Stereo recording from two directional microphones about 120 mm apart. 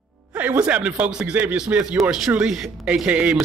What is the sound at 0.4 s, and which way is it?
Speech, 15° right (ahead or behind).